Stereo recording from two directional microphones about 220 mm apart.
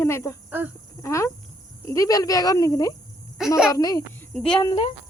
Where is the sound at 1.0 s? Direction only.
15° left (ahead or behind).